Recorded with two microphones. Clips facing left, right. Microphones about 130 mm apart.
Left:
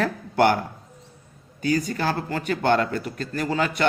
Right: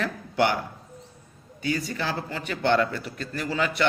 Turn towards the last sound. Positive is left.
turn(degrees=45)  # may be behind; listen again after turning